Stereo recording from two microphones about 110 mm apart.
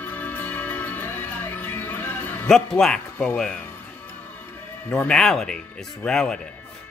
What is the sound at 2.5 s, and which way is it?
Speech, 5° left (ahead or behind).